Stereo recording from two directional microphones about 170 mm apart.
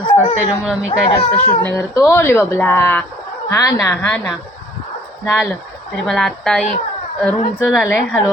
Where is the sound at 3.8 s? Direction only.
10° left (ahead or behind).